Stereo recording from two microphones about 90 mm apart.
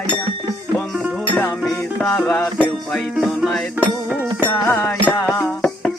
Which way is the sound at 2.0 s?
25° left (ahead or behind).